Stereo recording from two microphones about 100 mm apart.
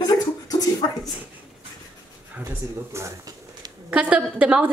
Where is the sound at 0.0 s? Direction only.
40° left (ahead or behind).